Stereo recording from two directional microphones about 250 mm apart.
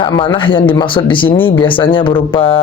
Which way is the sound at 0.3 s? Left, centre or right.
Centre.